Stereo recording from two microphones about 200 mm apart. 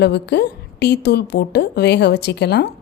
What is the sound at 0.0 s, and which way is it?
A woman's voice, 55° left (ahead or behind).